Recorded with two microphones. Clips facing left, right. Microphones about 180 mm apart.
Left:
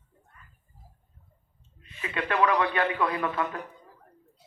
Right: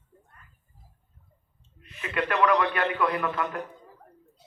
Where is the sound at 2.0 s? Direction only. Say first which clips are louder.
Right 2 dB; 25° left (ahead or behind).